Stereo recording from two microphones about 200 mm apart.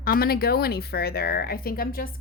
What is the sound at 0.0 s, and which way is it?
Speech, 45° left (ahead or behind).